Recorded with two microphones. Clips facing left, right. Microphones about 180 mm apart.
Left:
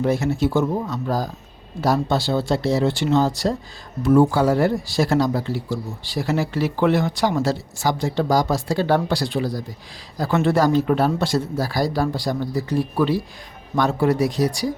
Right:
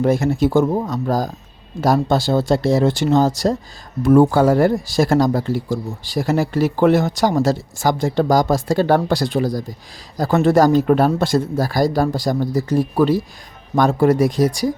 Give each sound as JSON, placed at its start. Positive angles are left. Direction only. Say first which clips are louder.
{"t": 0.0, "sound": "speech", "louder": "right 4 dB", "side_deg": -50}
{"t": 4.0, "sound": "speech", "louder": "right 3 dB", "side_deg": -55}